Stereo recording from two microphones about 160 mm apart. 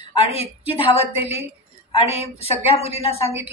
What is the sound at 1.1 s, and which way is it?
A woman's voice, 40° left (ahead or behind).